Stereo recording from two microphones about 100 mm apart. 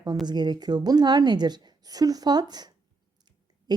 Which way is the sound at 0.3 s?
45° right (ahead or behind).